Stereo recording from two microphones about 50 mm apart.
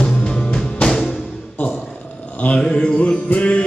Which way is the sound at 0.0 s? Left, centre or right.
Centre.